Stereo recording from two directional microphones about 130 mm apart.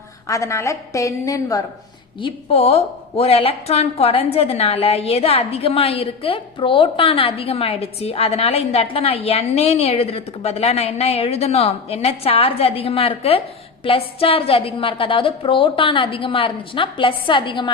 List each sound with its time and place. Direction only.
0.3 s a woman's voice: 25° left (ahead or behind)
2.1 s a woman's voice: 45° left (ahead or behind)